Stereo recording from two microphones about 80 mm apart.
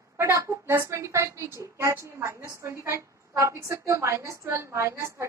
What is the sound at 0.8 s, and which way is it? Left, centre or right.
A woman's voice, right.